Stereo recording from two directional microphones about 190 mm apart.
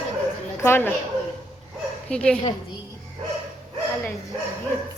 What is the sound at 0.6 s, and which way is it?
Speech, 10° left (ahead or behind).